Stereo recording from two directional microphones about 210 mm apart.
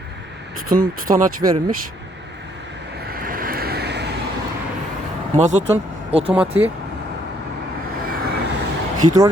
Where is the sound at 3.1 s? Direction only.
45° right (ahead or behind).